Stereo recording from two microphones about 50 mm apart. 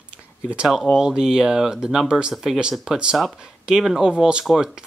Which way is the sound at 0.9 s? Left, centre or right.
Centre.